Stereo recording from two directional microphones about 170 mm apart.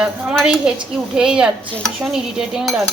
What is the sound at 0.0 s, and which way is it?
Speech, 5° right (ahead or behind).